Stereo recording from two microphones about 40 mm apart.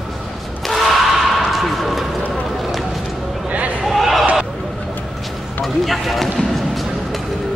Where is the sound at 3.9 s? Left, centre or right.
Centre.